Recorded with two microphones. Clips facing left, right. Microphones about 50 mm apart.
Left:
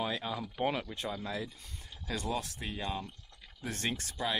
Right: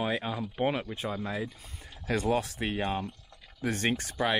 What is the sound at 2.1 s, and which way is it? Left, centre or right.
Speech, right.